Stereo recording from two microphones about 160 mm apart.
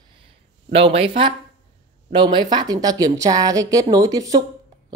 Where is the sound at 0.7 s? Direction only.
35° right (ahead or behind).